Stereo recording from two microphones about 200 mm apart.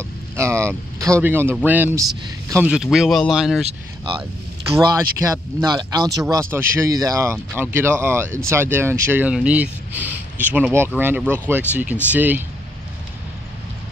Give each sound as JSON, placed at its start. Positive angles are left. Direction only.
{"t": 0.4, "sound": "speech", "side_deg": -15}
{"t": 4.7, "sound": "speech", "side_deg": -15}